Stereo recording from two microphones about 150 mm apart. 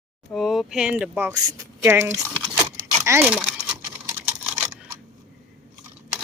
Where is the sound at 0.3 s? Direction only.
Centre (ahead or behind).